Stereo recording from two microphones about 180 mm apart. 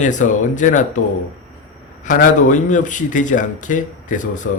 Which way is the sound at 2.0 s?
45° left (ahead or behind).